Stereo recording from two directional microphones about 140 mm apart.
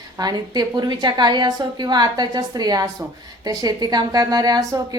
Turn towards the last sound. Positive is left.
turn(degrees=-25)  # may be behind; listen again after turning